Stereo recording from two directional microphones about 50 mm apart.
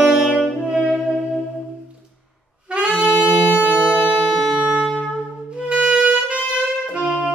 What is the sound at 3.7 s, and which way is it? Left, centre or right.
Music, centre.